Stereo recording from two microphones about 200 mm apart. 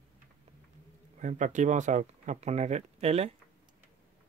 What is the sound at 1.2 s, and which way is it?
Speech, 40° right (ahead or behind).